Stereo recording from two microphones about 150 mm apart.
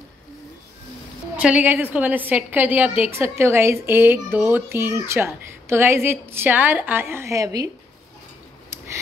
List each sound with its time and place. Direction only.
1.3 s a child's voice: 10° right (ahead or behind)